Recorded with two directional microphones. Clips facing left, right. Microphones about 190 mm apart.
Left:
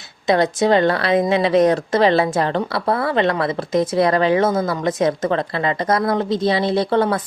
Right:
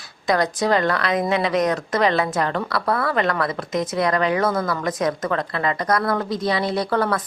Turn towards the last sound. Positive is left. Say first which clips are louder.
# left 4 dB
turn(degrees=25)  # may be behind; listen again after turning